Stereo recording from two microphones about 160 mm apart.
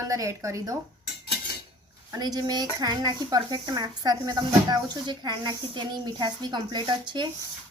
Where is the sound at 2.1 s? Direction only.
25° right (ahead or behind).